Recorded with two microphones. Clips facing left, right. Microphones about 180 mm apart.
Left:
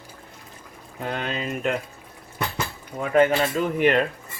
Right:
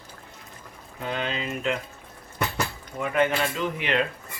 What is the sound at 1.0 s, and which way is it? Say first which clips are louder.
Speech: left 1 dB; 45° left (ahead or behind).